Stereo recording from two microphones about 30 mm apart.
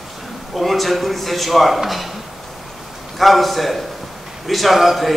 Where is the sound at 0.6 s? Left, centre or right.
Centre.